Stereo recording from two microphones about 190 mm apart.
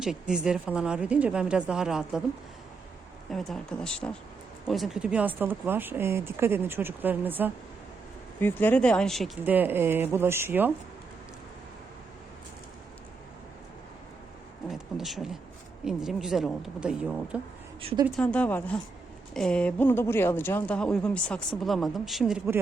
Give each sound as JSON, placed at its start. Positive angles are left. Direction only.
{"t": 0.0, "sound": "a woman's voice", "side_deg": -5}
{"t": 3.2, "sound": "a woman's voice", "side_deg": 0}
{"t": 8.4, "sound": "a woman's voice", "side_deg": 10}
{"t": 9.4, "sound": "speech", "side_deg": -10}
{"t": 14.7, "sound": "a woman's voice", "side_deg": 0}
{"t": 17.7, "sound": "speech", "side_deg": -30}
{"t": 18.2, "sound": "a woman's voice", "side_deg": 5}